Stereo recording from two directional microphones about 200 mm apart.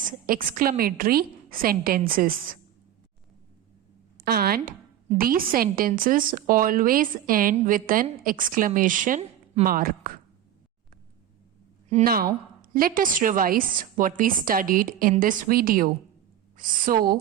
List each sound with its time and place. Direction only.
0.0 s a woman's voice: 45° right (ahead or behind)
4.2 s a woman's voice: 50° right (ahead or behind)
12.0 s a woman's voice: 50° right (ahead or behind)